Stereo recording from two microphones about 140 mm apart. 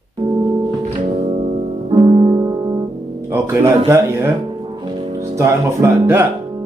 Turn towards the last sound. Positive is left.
turn(degrees=-15)  # may be behind; listen again after turning